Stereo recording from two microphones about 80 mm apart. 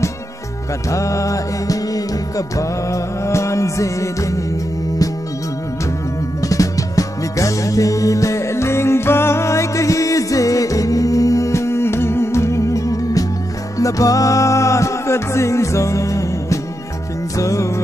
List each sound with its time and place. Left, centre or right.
0.8 s music: left
6.4 s music: left